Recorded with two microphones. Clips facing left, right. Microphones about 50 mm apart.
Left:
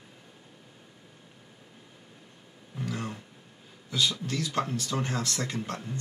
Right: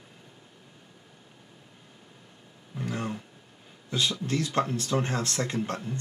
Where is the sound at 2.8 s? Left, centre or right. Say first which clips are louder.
Right 2 dB; right.